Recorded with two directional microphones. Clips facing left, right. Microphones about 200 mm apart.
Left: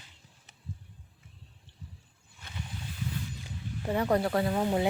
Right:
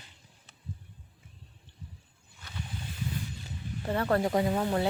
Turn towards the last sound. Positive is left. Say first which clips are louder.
# right 1 dB
turn(degrees=-15)  # may be behind; listen again after turning